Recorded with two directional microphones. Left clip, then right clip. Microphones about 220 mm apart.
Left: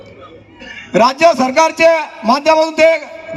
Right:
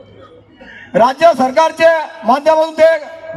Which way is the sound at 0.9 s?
45° left (ahead or behind).